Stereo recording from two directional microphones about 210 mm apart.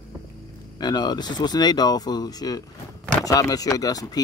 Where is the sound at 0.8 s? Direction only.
20° left (ahead or behind).